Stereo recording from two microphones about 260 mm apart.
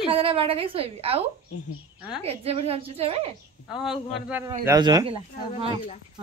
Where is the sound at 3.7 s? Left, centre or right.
Centre.